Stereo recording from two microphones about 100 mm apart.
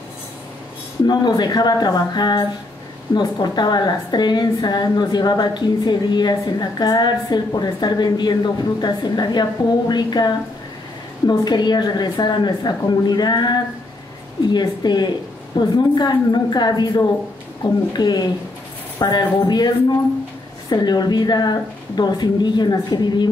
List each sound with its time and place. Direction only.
1.0 s a woman's voice: 45° left (ahead or behind)
20.7 s a woman's voice: 45° left (ahead or behind)